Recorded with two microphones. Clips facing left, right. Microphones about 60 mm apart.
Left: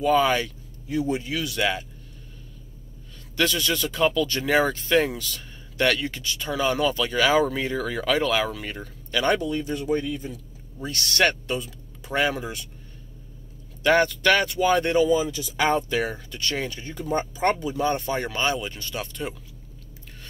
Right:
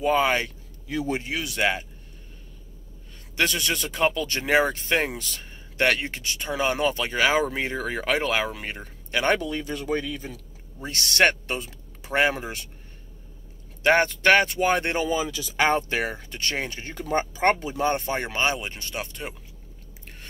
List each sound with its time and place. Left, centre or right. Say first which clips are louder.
0.0 s speech: left 1 dB; right
0.8 s a man's voice: left 2 dB; right
1.3 s speech: even; right
3.3 s speech: left 1 dB; right
9.4 s speech: left 3 dB; right
10.8 s speech: right 1 dB; right
13.8 s speech: even; right
15.0 s speech: left 4 dB; right
16.1 s speech: left 1 dB; right
16.8 s speech: even; right
17.6 s speech: even; right